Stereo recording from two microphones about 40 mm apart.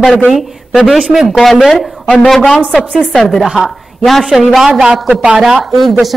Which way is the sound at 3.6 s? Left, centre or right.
Centre.